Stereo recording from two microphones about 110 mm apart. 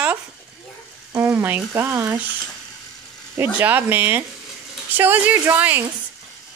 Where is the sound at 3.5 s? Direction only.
20° right (ahead or behind).